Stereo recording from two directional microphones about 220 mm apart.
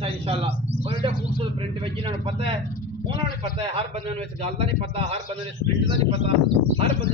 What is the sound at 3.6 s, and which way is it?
A man's voice, 25° right (ahead or behind).